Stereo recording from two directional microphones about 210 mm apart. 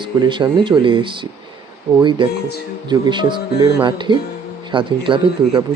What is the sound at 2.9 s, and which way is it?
Speech, 20° right (ahead or behind).